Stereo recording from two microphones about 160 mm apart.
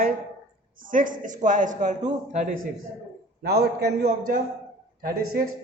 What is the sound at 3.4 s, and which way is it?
Speech, 90° right.